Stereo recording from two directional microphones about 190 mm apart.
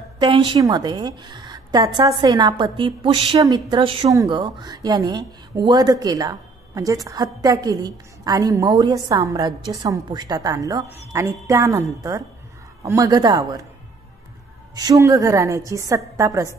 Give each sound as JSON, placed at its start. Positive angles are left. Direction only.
{"t": 0.2, "sound": "a woman's voice", "side_deg": -25}
{"t": 14.8, "sound": "a woman's voice", "side_deg": -20}